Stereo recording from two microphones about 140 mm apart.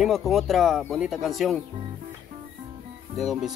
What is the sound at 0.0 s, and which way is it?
Speech, centre (ahead or behind).